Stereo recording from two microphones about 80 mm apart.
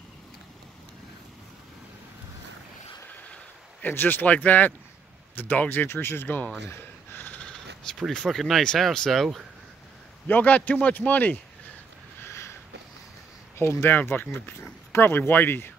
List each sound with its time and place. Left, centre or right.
3.8 s a man's voice: left
7.4 s a sound: centre
8.1 s speech: centre
10.2 s a man's voice: centre
12.3 s a sound: left
13.6 s a man's voice: left